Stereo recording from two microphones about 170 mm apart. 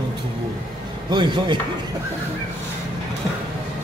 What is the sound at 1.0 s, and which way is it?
Speech, 25° right (ahead or behind).